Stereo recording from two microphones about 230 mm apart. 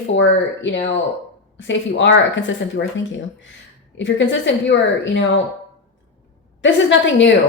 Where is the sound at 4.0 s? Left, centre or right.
Left.